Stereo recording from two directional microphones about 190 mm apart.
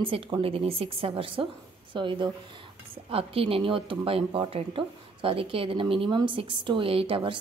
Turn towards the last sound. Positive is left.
turn(degrees=-25)  # may be behind; listen again after turning